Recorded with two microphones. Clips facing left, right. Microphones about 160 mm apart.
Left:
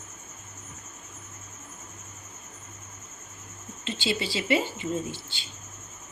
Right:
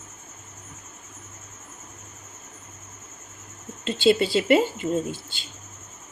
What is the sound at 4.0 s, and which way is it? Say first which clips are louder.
Speech: right 11 dB; 55° right (ahead or behind).